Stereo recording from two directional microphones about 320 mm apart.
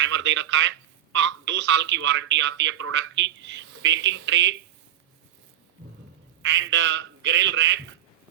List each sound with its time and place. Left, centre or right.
0.0 s speech: right
6.4 s speech: right